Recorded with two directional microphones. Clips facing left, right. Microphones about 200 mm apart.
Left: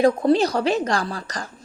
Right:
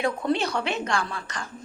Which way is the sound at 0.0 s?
35° left (ahead or behind).